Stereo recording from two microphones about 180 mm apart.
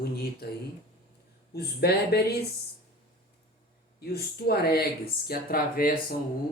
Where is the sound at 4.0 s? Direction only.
60° left (ahead or behind).